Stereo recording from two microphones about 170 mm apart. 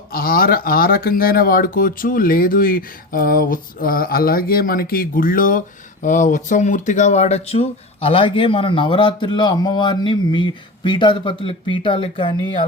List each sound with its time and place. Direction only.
0.1 s speech: 60° left (ahead or behind); by 12.6 s 30° left (ahead or behind)